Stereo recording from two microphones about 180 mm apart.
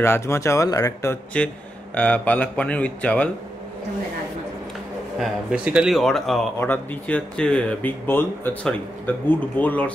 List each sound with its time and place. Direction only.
0.0 s speech: 15° left (ahead or behind)
1.3 s speech: 5° left (ahead or behind)
5.2 s speech: 5° right (ahead or behind); by 9.8 s 10° left (ahead or behind)